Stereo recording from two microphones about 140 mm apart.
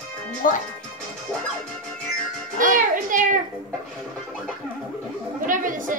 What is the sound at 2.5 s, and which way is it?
Music, 70° right (ahead or behind).